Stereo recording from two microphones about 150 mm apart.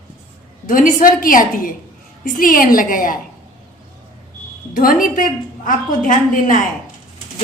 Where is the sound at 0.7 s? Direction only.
65° left (ahead or behind).